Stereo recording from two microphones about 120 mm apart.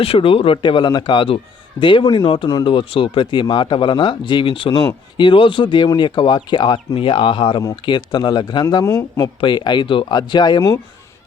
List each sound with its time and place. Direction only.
0.0 s a man's voice: 50° left (ahead or behind)
8.8 s speech: 25° left (ahead or behind)
9.2 s a man's voice: 40° left (ahead or behind)